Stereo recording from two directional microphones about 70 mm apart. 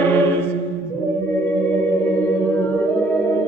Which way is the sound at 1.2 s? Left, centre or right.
Left.